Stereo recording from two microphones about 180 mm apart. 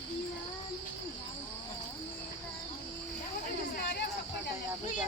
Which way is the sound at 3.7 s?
65° left (ahead or behind).